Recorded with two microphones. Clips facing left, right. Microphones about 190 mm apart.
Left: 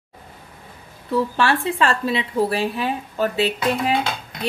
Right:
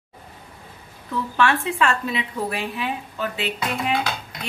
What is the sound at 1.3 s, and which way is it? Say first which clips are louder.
A woman's voice: left 1 dB; 35° left (ahead or behind).